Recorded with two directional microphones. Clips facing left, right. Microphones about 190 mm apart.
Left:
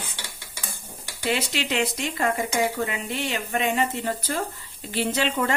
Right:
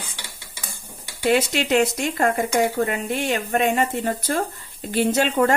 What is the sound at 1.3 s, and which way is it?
Speech, 50° right (ahead or behind).